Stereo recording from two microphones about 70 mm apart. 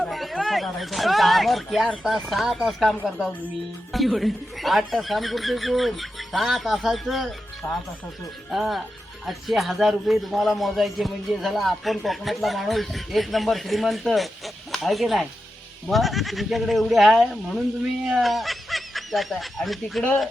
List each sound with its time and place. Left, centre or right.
0.0 s a sound: centre
2.0 s a man's voice: centre
3.9 s a man's voice: centre
7.6 s speech: left
8.4 s a man's voice: centre